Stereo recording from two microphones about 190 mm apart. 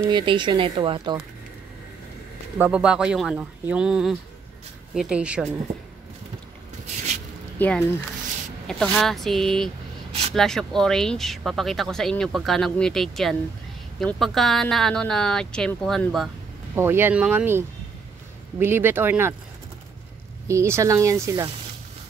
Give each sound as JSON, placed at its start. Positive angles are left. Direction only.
{"t": 0.1, "sound": "speech", "side_deg": -25}
{"t": 2.6, "sound": "speech", "side_deg": -5}
{"t": 7.5, "sound": "speech", "side_deg": 10}
{"t": 16.7, "sound": "speech", "side_deg": -10}
{"t": 20.4, "sound": "speech", "side_deg": -15}